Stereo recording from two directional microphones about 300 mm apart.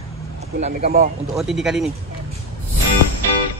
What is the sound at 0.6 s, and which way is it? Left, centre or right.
Speech, right.